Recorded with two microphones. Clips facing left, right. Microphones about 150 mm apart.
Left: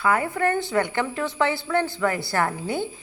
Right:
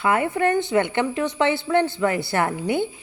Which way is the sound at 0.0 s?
20° right (ahead or behind).